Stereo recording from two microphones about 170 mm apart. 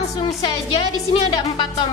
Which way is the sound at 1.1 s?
30° left (ahead or behind).